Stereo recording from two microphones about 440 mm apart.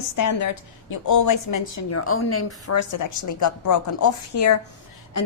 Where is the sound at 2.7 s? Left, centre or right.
Left.